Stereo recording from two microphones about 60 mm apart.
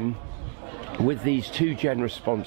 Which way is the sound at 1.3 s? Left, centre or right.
Centre.